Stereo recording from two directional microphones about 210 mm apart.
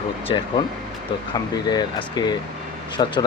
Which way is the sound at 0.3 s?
20° left (ahead or behind).